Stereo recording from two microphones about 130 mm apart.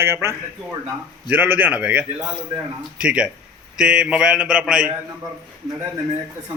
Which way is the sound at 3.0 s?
10° right (ahead or behind).